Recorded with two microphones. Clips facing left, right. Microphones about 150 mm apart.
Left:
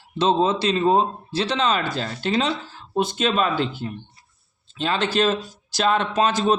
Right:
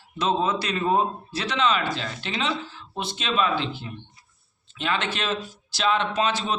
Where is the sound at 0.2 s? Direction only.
30° left (ahead or behind).